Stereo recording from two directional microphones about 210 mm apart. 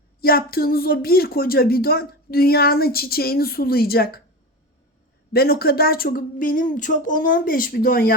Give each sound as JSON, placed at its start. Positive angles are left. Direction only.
{"t": 0.2, "sound": "speech", "side_deg": 45}
{"t": 5.3, "sound": "speech", "side_deg": 45}